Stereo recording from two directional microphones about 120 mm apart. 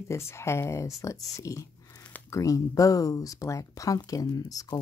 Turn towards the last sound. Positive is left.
turn(degrees=30)  # may be behind; listen again after turning